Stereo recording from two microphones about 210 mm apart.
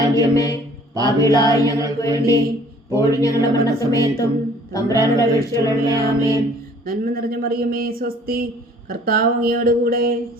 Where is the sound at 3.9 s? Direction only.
15° left (ahead or behind).